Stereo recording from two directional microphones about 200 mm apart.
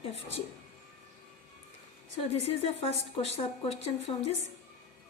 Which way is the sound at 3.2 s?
30° left (ahead or behind).